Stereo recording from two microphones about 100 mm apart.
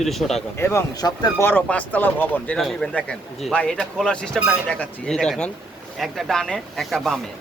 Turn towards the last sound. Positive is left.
turn(degrees=0)  # may be behind; listen again after turning